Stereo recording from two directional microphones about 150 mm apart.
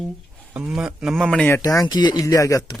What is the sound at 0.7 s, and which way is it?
Speech, 5° right (ahead or behind).